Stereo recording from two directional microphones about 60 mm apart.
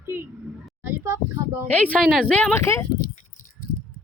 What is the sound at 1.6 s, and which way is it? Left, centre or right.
Speech, left.